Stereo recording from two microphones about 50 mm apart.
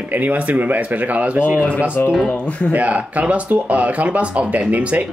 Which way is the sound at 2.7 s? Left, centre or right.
Right.